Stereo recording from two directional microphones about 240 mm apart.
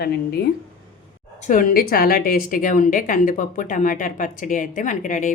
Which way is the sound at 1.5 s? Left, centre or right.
Left.